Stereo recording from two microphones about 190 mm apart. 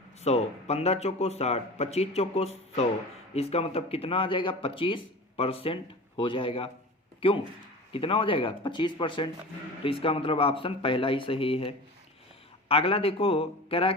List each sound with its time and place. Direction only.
0.2 s speech: 35° left (ahead or behind)